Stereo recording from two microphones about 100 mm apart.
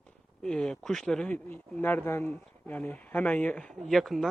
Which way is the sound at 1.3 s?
20° left (ahead or behind).